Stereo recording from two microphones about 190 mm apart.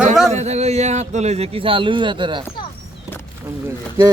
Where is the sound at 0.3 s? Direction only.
35° right (ahead or behind).